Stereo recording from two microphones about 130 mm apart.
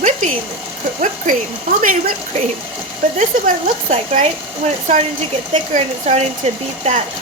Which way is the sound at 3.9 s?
60° right (ahead or behind).